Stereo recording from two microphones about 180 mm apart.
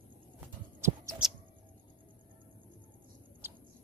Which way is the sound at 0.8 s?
15° right (ahead or behind).